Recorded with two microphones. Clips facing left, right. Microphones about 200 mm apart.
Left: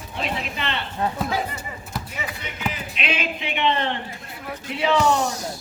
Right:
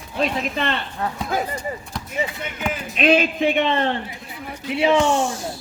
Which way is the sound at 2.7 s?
45° right (ahead or behind).